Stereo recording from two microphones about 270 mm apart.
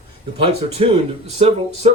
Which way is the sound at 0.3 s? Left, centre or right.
Centre.